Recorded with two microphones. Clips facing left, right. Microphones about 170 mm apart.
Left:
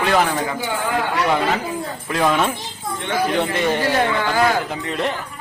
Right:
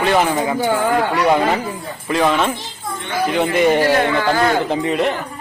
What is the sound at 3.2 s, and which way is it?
Speech, 15° right (ahead or behind).